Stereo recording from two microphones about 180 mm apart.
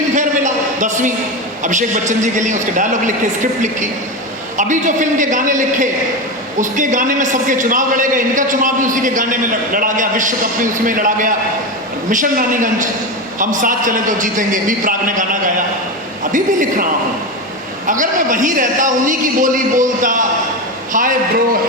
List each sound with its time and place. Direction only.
0.2 s a sound: 45° right (ahead or behind)
1.6 s a man's voice: 45° right (ahead or behind)
17.8 s a man's voice: 45° right (ahead or behind)